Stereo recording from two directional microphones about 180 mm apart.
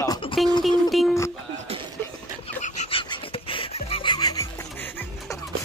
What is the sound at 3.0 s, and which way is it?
Music, 30° left (ahead or behind).